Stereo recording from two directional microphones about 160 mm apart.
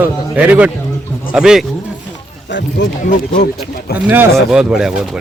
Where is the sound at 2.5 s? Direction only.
90° left.